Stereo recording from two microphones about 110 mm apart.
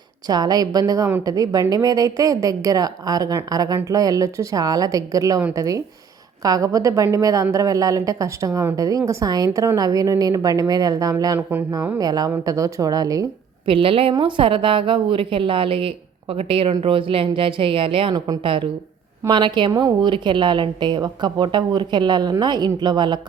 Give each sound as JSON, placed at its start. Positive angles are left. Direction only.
{"t": 0.3, "sound": "speech", "side_deg": -40}
{"t": 13.7, "sound": "a woman's voice", "side_deg": -55}